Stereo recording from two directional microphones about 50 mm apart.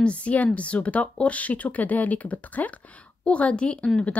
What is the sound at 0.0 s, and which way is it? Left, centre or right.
A woman's voice, left.